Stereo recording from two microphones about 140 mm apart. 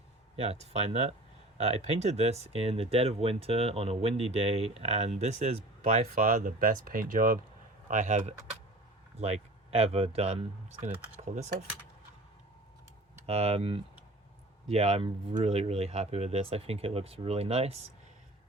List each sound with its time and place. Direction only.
0.3 s speech: 50° right (ahead or behind); by 7.3 s 75° right (ahead or behind)
7.9 s speech: 65° right (ahead or behind)
9.2 s speech: 45° right (ahead or behind)
13.2 s speech: 45° right (ahead or behind)